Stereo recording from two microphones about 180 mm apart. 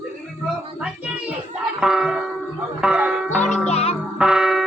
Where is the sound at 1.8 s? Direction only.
5° right (ahead or behind).